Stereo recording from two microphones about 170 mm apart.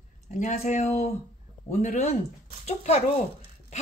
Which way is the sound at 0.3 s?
45° left (ahead or behind).